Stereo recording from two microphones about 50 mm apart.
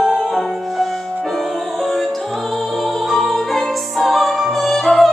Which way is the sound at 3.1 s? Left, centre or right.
Centre.